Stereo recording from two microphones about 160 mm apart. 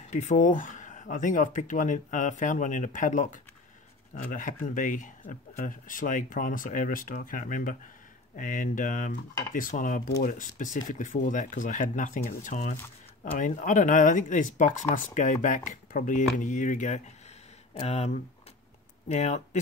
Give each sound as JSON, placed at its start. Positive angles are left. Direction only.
{"t": 0.0, "sound": "speech", "side_deg": 50}